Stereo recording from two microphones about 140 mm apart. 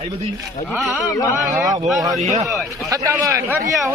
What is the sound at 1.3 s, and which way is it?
Speech, 25° right (ahead or behind).